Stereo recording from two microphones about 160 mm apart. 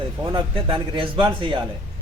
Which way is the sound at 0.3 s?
30° right (ahead or behind).